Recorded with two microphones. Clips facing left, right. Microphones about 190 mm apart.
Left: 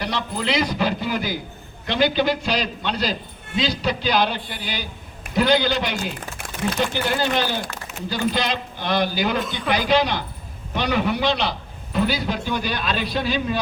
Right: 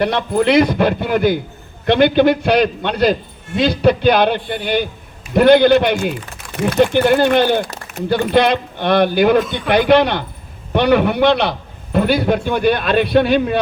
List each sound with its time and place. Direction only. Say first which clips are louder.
0.0 s a man's voice: right 10 dB; 60° right (ahead or behind)